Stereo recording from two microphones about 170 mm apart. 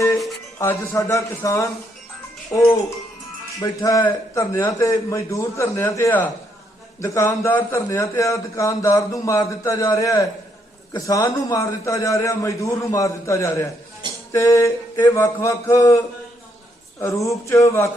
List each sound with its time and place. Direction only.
0.6 s a man's voice: 15° left (ahead or behind)
17.0 s a man's voice: 15° left (ahead or behind)